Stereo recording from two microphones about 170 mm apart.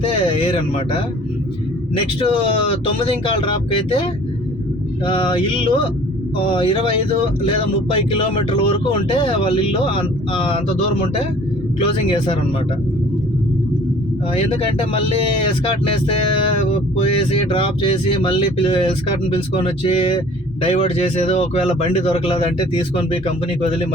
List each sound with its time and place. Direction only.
0.0 s speech: 30° left (ahead or behind)
2.2 s speech: 35° left (ahead or behind)
5.0 s a sound: 30° left (ahead or behind)
7.9 s speech: 30° left (ahead or behind)
11.8 s speech: 30° left (ahead or behind)
14.9 s speech: 30° left (ahead or behind)
17.5 s speech: 30° left (ahead or behind)